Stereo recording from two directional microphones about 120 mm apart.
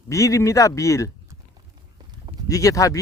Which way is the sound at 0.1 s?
25° left (ahead or behind).